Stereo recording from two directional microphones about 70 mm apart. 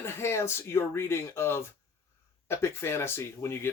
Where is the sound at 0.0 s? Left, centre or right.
Left.